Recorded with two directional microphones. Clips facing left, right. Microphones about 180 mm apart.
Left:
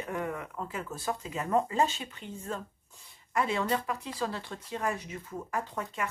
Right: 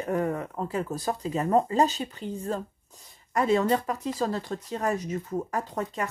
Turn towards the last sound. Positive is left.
turn(degrees=-40)  # may be behind; listen again after turning